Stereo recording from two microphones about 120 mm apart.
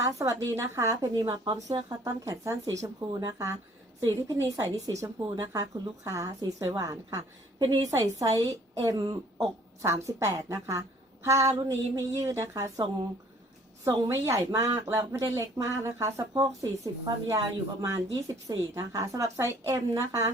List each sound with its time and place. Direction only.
0.2 s a woman's voice: 25° right (ahead or behind)